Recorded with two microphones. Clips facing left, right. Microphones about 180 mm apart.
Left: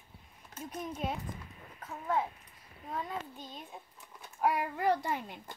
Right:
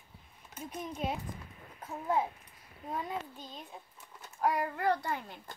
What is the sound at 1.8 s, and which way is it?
Speech, 20° right (ahead or behind).